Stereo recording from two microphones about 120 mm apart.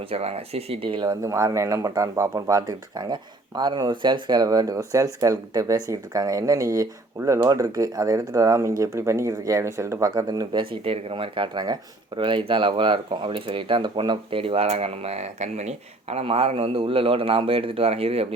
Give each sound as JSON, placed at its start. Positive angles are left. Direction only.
{"t": 0.0, "sound": "speech", "side_deg": -55}
{"t": 7.5, "sound": "speech", "side_deg": -30}